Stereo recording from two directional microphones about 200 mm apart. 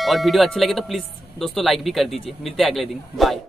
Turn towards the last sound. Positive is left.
turn(degrees=0)  # may be behind; listen again after turning